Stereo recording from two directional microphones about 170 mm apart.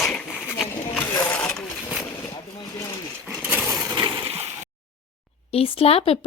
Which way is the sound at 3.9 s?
25° right (ahead or behind).